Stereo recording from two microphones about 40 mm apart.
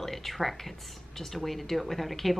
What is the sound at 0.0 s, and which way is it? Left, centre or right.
Speech, centre.